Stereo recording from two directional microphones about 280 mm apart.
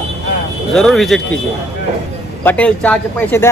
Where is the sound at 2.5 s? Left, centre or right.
Centre.